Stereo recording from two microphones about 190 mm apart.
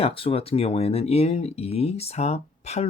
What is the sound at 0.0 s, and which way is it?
Speech, 30° left (ahead or behind).